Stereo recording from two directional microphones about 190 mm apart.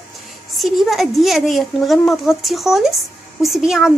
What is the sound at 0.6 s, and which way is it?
Speech, centre (ahead or behind).